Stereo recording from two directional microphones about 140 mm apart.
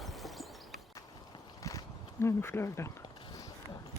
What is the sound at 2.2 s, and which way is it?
Speech, 20° left (ahead or behind).